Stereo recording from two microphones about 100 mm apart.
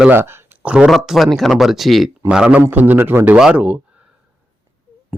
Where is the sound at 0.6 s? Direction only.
10° right (ahead or behind).